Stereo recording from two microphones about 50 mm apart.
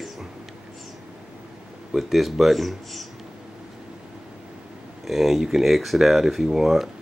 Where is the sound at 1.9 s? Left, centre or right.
Centre.